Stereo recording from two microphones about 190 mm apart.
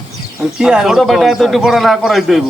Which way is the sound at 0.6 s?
5° right (ahead or behind).